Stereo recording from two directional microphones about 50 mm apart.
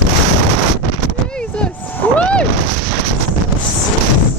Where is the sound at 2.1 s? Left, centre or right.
Left.